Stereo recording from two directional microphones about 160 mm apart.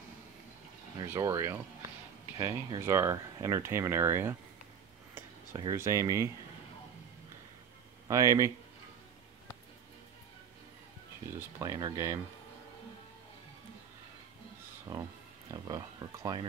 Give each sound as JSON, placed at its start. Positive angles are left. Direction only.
{"t": 0.9, "sound": "speech", "side_deg": -20}
{"t": 5.6, "sound": "speech", "side_deg": -20}
{"t": 8.1, "sound": "speech", "side_deg": -20}
{"t": 11.3, "sound": "speech", "side_deg": -15}
{"t": 14.9, "sound": "speech", "side_deg": -25}